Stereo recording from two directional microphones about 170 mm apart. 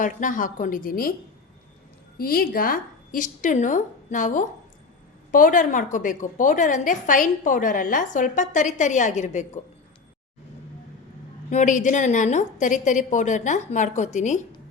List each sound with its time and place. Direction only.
0.0 s a woman's voice: 50° left (ahead or behind)
2.1 s a woman's voice: 60° left (ahead or behind); by 9.6 s 45° left (ahead or behind)
11.5 s a woman's voice: 45° left (ahead or behind)